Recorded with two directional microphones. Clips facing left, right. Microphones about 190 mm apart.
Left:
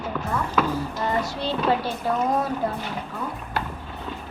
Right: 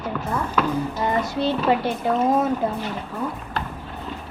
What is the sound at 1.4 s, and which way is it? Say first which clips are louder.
Speech: right 4 dB; 20° right (ahead or behind).